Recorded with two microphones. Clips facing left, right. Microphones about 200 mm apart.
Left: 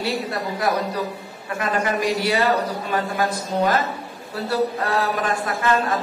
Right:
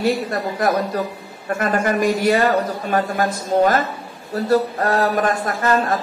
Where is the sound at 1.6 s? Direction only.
45° right (ahead or behind).